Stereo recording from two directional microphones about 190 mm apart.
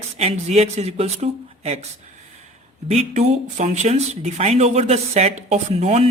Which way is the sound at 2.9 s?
35° right (ahead or behind).